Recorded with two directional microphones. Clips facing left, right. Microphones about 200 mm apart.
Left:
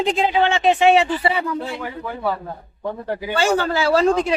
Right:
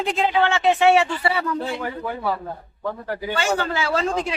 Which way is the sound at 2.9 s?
25° left (ahead or behind).